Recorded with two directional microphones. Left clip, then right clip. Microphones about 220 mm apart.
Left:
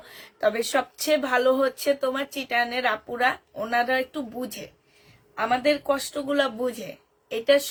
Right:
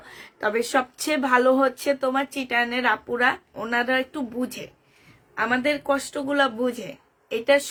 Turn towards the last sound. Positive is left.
turn(degrees=-25)  # may be behind; listen again after turning